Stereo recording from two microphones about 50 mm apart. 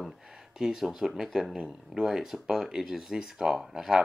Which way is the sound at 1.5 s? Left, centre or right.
Centre.